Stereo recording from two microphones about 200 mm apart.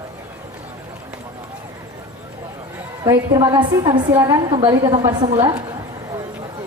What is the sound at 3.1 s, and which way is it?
A woman's voice, 20° right (ahead or behind).